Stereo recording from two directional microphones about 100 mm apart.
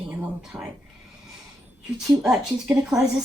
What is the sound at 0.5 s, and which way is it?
Speech, 25° right (ahead or behind).